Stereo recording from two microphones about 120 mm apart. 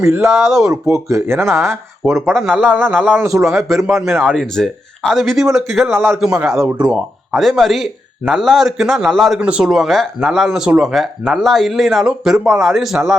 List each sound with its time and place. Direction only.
0.0 s speech: 20° right (ahead or behind)
0.3 s speech: centre (ahead or behind)
0.9 s speech: 25° right (ahead or behind)
2.0 s speech: centre (ahead or behind)
3.0 s a man's voice: 15° right (ahead or behind)
3.2 s speech: 25° right (ahead or behind)
3.7 s speech: centre (ahead or behind)
9.4 s speech: 10° right (ahead or behind)